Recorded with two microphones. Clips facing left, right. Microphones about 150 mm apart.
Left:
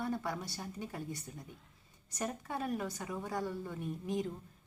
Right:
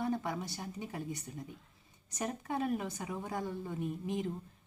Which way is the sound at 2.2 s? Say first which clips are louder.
Right 2 dB; 20° right (ahead or behind).